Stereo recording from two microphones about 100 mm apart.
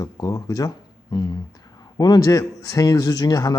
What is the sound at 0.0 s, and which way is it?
Speech, 35° left (ahead or behind).